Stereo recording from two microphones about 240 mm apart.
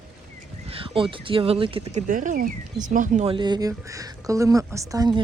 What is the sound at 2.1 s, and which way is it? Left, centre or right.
Speech, right.